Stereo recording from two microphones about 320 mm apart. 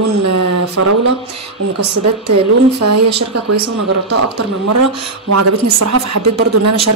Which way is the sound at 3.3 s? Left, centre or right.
Right.